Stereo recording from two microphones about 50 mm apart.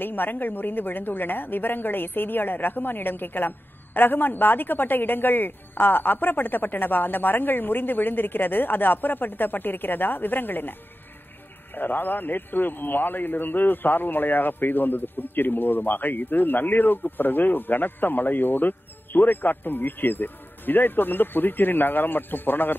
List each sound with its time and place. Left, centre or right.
0.0 s a man's voice: left